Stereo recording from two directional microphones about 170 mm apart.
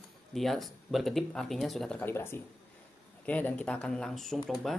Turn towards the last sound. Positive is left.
turn(degrees=0)  # may be behind; listen again after turning